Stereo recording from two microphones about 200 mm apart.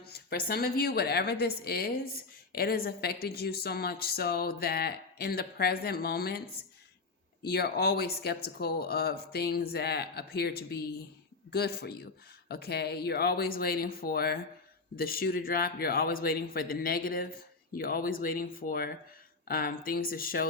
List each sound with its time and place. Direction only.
0.0 s speech: 50° left (ahead or behind)